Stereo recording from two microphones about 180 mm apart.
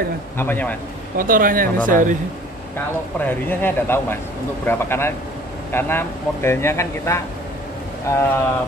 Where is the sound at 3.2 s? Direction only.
10° left (ahead or behind).